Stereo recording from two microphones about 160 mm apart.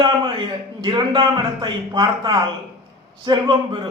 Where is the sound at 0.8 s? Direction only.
25° right (ahead or behind).